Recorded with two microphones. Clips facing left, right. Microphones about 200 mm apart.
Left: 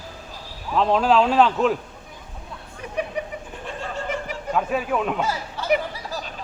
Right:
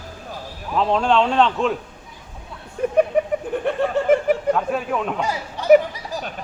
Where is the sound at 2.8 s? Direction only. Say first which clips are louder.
Right 15 dB; 50° right (ahead or behind).